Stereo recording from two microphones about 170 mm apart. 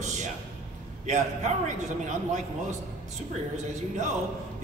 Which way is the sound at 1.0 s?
45° right (ahead or behind).